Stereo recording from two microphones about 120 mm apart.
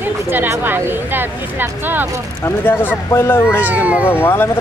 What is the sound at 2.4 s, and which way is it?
Speech, 15° left (ahead or behind).